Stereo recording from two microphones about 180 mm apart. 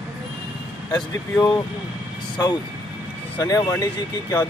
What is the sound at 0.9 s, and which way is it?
Speech, 25° left (ahead or behind).